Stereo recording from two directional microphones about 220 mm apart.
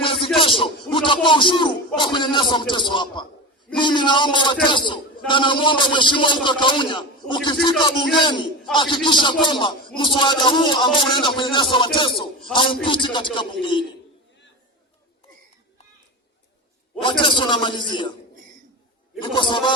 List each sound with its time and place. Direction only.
0.0 s rapping: 25° left (ahead or behind)
0.3 s a sound: 25° left (ahead or behind)
2.0 s a man's voice: 20° left (ahead or behind)
17.0 s speech: 20° left (ahead or behind)
19.2 s speech: 20° left (ahead or behind)